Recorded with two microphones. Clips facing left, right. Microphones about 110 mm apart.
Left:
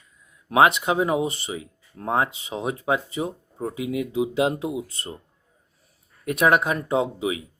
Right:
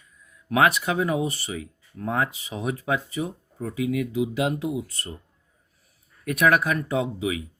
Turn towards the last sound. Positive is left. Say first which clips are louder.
# left 2 dB
turn(degrees=25)  # may be behind; listen again after turning